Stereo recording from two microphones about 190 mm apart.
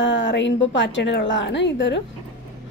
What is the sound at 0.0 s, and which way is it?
A woman's voice, 75° left (ahead or behind).